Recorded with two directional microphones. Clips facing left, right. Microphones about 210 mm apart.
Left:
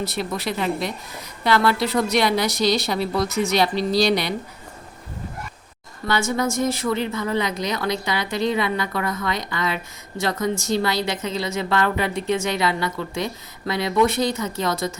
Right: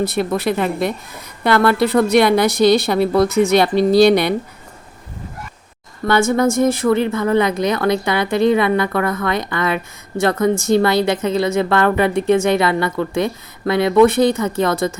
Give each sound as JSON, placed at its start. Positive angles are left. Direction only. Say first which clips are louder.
{"t": 0.0, "sound": "speech", "louder": "right 8 dB", "side_deg": -55}
{"t": 6.1, "sound": "speech", "louder": "right 7 dB", "side_deg": -55}